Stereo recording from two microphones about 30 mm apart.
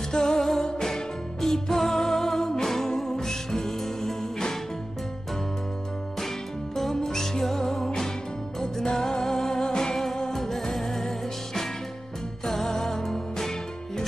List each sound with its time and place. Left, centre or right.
0.1 s music: centre
0.4 s music: centre
6.1 s music: centre
9.7 s music: left
9.9 s music: centre